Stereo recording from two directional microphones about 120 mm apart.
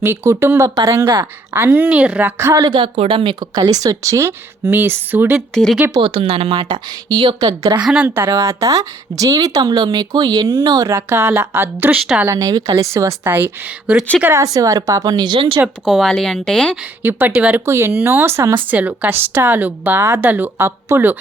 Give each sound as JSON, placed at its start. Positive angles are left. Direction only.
{"t": 0.0, "sound": "speech", "side_deg": -20}
{"t": 2.4, "sound": "speech", "side_deg": -25}
{"t": 2.6, "sound": "speech", "side_deg": -45}
{"t": 5.9, "sound": "speech", "side_deg": -45}
{"t": 7.9, "sound": "speech", "side_deg": -10}
{"t": 8.1, "sound": "speech", "side_deg": -25}
{"t": 14.4, "sound": "speech", "side_deg": -30}
{"t": 15.6, "sound": "a woman's voice", "side_deg": 0}
{"t": 17.0, "sound": "speech", "side_deg": -15}